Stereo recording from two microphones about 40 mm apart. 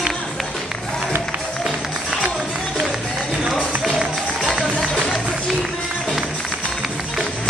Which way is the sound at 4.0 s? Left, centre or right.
Centre.